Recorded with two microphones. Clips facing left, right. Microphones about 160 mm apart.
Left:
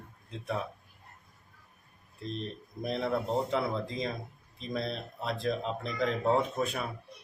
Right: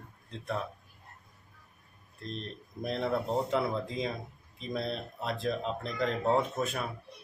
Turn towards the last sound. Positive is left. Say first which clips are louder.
# even
turn(degrees=0)  # may be behind; listen again after turning